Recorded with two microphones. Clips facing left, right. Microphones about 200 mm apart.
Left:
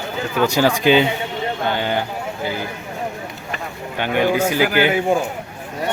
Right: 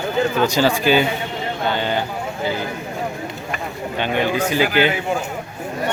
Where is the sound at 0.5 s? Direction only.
15° left (ahead or behind).